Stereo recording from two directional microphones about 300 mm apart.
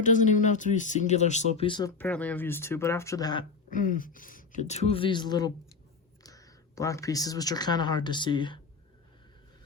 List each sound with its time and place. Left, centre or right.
0.0 s speech: left
2.0 s speech: centre
3.7 s speech: left